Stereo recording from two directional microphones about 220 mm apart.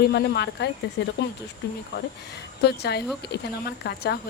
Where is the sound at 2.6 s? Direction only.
50° left (ahead or behind).